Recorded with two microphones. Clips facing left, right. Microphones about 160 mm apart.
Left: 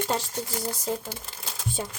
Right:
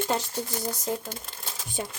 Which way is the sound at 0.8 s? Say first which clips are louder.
Even; 10° left (ahead or behind).